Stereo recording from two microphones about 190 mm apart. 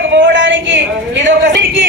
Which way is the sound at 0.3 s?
70° right (ahead or behind).